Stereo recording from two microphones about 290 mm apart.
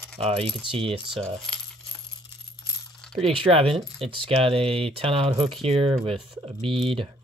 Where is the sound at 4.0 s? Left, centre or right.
Centre.